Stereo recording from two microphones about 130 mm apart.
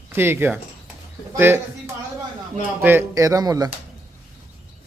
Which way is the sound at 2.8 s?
15° right (ahead or behind).